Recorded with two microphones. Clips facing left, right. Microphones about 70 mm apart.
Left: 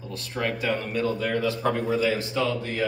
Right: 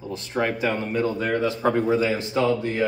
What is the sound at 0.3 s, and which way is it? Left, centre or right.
Speech, right.